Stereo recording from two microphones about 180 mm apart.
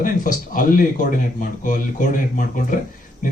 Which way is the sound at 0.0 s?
50° left (ahead or behind).